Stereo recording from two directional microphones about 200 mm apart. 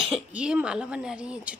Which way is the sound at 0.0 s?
5° right (ahead or behind).